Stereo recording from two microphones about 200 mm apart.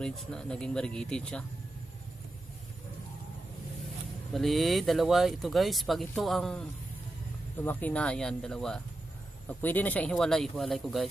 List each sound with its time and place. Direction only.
0.0 s speech: 5° left (ahead or behind)
4.3 s speech: centre (ahead or behind)